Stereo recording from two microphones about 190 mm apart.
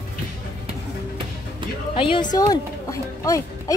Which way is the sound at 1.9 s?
25° left (ahead or behind).